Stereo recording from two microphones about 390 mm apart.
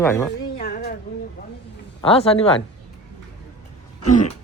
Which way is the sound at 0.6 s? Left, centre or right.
Left.